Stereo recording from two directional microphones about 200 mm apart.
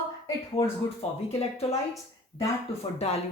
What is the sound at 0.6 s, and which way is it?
Speech, 30° left (ahead or behind).